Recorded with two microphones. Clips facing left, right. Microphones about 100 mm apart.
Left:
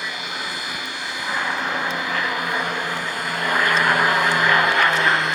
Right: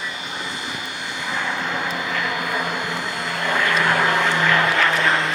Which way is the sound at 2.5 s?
25° right (ahead or behind).